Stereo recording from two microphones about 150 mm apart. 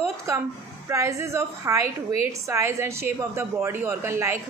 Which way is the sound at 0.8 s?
20° right (ahead or behind).